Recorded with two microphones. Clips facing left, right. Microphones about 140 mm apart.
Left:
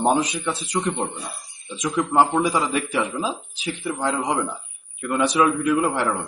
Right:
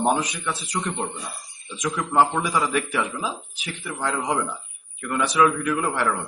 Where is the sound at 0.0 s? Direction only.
20° left (ahead or behind).